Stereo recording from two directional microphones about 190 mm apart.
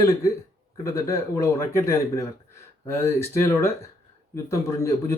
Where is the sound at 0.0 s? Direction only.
15° left (ahead or behind).